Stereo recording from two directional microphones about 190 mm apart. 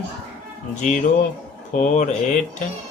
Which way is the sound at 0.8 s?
40° left (ahead or behind).